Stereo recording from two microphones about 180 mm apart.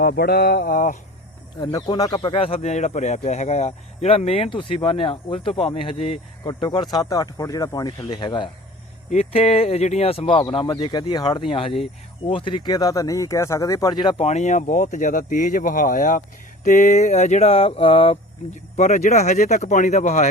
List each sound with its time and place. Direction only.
0.0 s a sound: 60° left (ahead or behind)
1.6 s speech: 20° left (ahead or behind)
9.0 s speech: 35° left (ahead or behind)
14.3 s speech: 40° left (ahead or behind)